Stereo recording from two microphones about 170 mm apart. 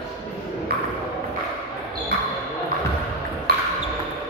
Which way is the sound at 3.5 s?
60° right (ahead or behind).